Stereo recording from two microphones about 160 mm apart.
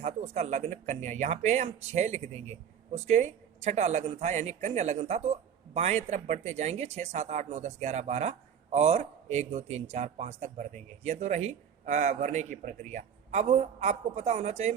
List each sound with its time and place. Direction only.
0.0 s a man's voice: 45° right (ahead or behind)